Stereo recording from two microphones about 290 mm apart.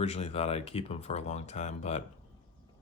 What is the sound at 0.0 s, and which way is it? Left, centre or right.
Speech, left.